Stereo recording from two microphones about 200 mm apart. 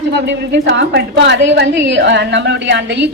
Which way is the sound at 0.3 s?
60° right (ahead or behind).